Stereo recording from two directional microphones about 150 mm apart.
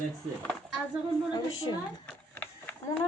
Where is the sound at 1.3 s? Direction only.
25° left (ahead or behind).